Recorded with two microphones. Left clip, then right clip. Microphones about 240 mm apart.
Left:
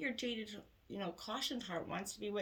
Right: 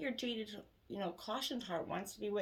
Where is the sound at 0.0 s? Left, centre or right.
Left.